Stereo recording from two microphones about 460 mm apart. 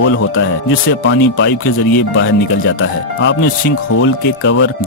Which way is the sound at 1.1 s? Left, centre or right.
Left.